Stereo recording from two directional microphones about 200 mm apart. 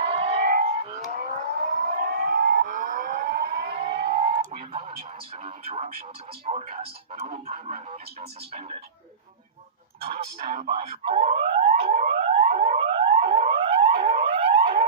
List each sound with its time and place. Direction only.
0.0 s siren: 30° right (ahead or behind)
0.4 s siren: 45° right (ahead or behind)
1.1 s civil defense siren: 40° right (ahead or behind); by 1.9 s 55° right (ahead or behind)
1.9 s siren: 45° right (ahead or behind)
2.6 s a sound: 40° right (ahead or behind)
2.9 s civil defense siren: 40° right (ahead or behind)
3.2 s civil defense siren: 55° right (ahead or behind)
3.8 s fire alarm: 30° right (ahead or behind)
4.4 s a sound: 30° right (ahead or behind)
6.4 s speech: 30° right (ahead or behind)
10.1 s speech: 25° right (ahead or behind)
11.8 s a sound: 35° right (ahead or behind)